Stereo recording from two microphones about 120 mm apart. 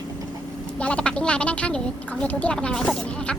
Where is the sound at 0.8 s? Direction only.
10° left (ahead or behind).